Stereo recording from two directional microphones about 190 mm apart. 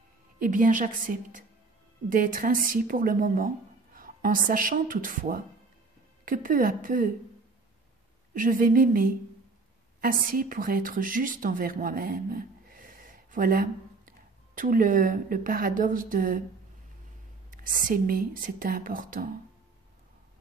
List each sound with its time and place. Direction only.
0.4 s speech: 45° right (ahead or behind)
8.3 s speech: 45° right (ahead or behind)
17.5 s speech: 45° right (ahead or behind)